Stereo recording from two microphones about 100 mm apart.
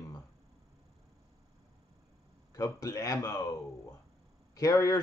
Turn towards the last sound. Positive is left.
turn(degrees=35)  # may be behind; listen again after turning